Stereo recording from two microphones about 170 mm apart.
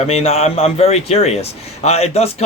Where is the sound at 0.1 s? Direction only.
40° left (ahead or behind).